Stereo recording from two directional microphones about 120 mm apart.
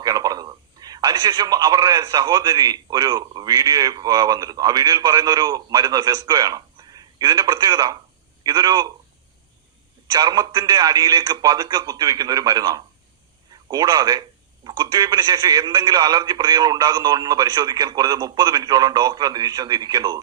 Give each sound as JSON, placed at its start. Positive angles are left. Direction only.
{"t": 0.0, "sound": "a man's voice", "side_deg": -30}
{"t": 10.1, "sound": "a man's voice", "side_deg": -35}